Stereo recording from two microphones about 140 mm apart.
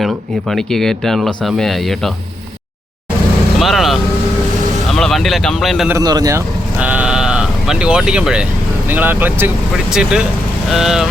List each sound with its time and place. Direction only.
0.0 s speech: centre (ahead or behind)
3.6 s speech: centre (ahead or behind)
6.0 s speech: 25° right (ahead or behind)
6.7 s speech: 10° right (ahead or behind)